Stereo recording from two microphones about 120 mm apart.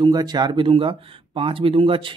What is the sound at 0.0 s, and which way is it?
Speech, 35° right (ahead or behind).